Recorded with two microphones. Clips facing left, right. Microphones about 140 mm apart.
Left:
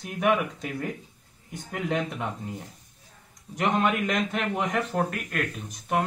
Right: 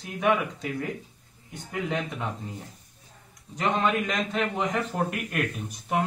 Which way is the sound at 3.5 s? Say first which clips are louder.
Left 1 dB; 10° left (ahead or behind).